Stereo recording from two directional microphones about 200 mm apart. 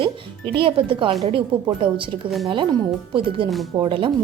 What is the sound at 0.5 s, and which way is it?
Speech, 25° right (ahead or behind).